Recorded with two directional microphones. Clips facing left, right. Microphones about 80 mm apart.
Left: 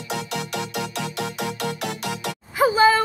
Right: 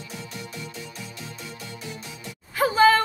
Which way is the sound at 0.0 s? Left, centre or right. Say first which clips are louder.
Left 9 dB; left.